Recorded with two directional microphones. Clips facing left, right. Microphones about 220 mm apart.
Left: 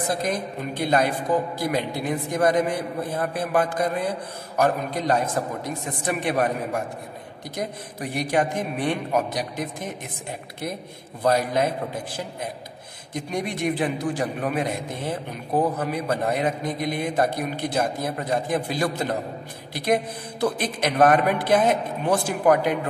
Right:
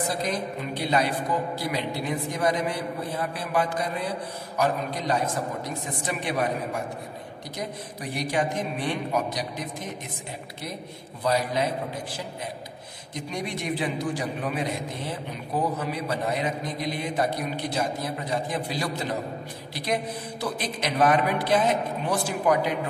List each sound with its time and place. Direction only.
0.2 s a man's voice: 50° left (ahead or behind)
8.1 s a man's voice: 55° left (ahead or behind)
11.2 s a man's voice: 50° left (ahead or behind)
13.1 s a man's voice: 50° left (ahead or behind)